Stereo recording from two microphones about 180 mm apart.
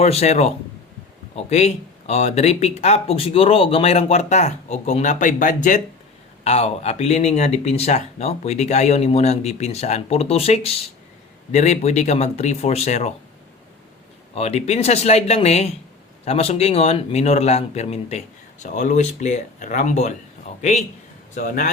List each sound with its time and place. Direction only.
0.0 s speech: 35° left (ahead or behind)
14.3 s a man's voice: 35° left (ahead or behind)